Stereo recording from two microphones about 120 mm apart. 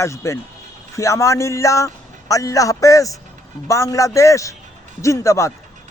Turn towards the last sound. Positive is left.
turn(degrees=25)  # may be behind; listen again after turning